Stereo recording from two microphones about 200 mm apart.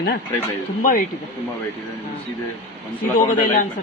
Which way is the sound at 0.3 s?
45° left (ahead or behind).